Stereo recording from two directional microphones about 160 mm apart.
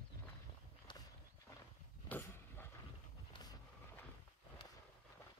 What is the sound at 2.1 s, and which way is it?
Vehicle, 15° left (ahead or behind).